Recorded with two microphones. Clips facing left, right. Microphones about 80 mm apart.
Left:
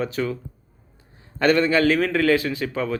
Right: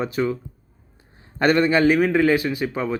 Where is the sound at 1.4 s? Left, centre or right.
Centre.